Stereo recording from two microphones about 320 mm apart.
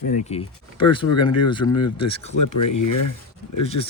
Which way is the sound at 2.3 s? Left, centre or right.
Left.